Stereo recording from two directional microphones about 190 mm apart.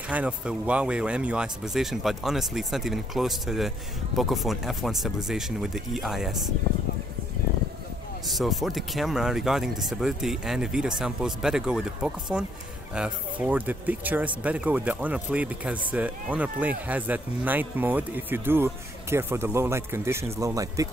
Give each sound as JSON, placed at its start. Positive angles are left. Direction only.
{"t": 0.1, "sound": "speech", "side_deg": -5}
{"t": 8.3, "sound": "speech", "side_deg": 0}